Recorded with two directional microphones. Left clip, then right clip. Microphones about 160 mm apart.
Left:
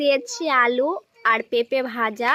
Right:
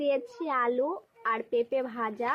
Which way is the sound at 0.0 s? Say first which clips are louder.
Left 8 dB; 35° left (ahead or behind).